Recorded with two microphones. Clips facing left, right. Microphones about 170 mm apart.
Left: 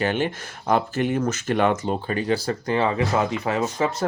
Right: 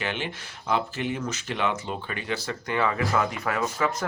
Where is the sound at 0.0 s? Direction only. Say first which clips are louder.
Left 8 dB; 45° left (ahead or behind).